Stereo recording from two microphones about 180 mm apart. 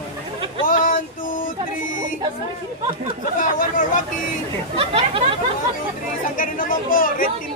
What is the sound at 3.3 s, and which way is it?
Speech, 50° left (ahead or behind).